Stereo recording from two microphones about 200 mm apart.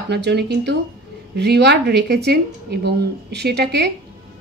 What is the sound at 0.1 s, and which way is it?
A woman's voice, 55° right (ahead or behind).